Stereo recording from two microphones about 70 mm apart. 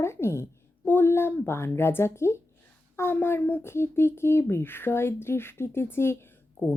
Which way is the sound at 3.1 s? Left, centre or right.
Left.